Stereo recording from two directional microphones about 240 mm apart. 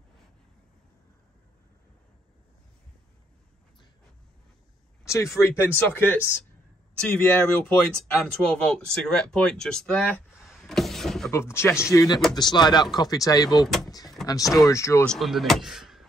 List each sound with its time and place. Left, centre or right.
5.0 s a sound: centre
5.4 s speech: centre
13.8 s vehicle: centre
14.2 s speech: centre
15.1 s speech: centre